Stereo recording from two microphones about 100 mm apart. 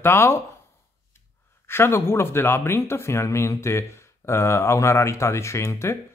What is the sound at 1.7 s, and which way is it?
Speech, 25° left (ahead or behind).